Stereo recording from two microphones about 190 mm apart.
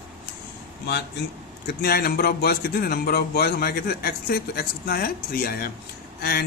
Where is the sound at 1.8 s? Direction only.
55° left (ahead or behind).